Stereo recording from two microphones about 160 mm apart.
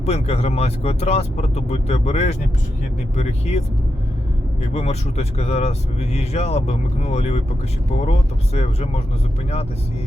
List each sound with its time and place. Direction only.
0.0 s speech: 40° left (ahead or behind)
4.7 s speech: 45° left (ahead or behind)
8.5 s speech: 40° left (ahead or behind)